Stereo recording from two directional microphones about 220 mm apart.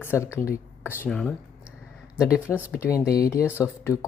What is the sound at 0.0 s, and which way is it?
Speech, 10° left (ahead or behind).